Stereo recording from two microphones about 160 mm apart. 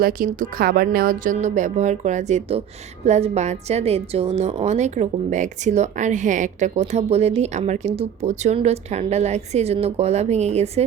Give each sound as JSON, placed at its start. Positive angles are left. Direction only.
{"t": 0.0, "sound": "a woman's voice", "side_deg": -60}